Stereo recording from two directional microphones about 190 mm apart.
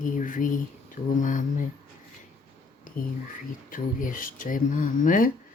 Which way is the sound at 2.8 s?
50° left (ahead or behind).